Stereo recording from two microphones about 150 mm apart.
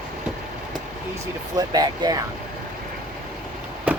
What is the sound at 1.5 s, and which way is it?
Speech, 25° right (ahead or behind).